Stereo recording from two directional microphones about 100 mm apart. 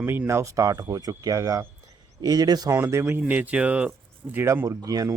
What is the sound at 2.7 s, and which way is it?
Speech, 25° right (ahead or behind).